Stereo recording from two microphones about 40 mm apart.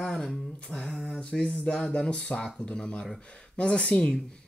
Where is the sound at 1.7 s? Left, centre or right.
Left.